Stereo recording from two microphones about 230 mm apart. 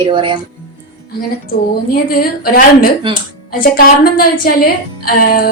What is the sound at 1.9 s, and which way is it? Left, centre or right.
A woman's voice, left.